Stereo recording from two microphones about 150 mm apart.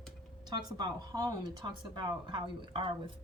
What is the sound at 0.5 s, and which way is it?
Speech, 25° right (ahead or behind).